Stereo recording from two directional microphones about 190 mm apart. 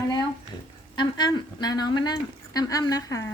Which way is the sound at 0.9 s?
25° left (ahead or behind).